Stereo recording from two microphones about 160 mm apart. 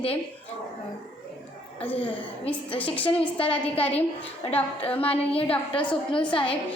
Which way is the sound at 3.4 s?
10° left (ahead or behind).